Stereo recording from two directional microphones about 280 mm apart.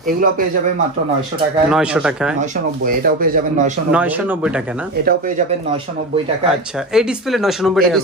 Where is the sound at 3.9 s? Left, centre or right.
Centre.